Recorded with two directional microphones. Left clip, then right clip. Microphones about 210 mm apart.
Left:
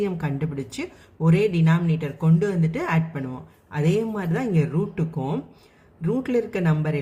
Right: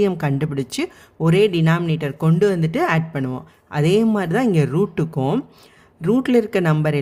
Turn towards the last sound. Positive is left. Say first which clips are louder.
# right 7 dB
turn(degrees=-50)  # may be behind; listen again after turning